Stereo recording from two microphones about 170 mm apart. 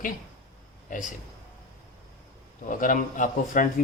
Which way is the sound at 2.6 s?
50° left (ahead or behind).